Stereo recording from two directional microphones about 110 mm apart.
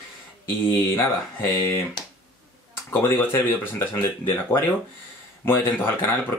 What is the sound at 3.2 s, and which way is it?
Speech, 20° left (ahead or behind).